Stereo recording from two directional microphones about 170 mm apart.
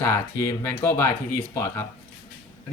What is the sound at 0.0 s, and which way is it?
Speech, 10° left (ahead or behind).